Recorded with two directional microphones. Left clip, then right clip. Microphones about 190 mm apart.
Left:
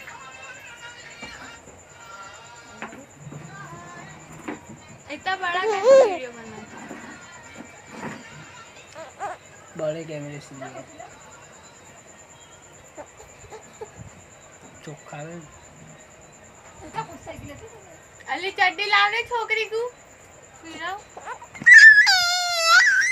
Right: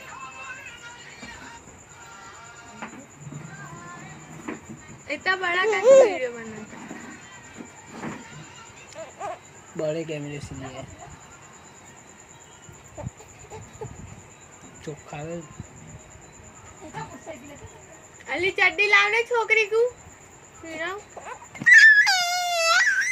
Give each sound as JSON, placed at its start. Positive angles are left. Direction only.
{"t": 5.0, "sound": "a woman's voice", "side_deg": -5}
{"t": 5.6, "sound": "speech", "side_deg": 15}
{"t": 9.0, "sound": "a sound", "side_deg": 20}
{"t": 9.7, "sound": "a woman's voice", "side_deg": 0}
{"t": 14.8, "sound": "speech", "side_deg": 5}
{"t": 18.3, "sound": "a woman's voice", "side_deg": 0}
{"t": 20.7, "sound": "a sound", "side_deg": 10}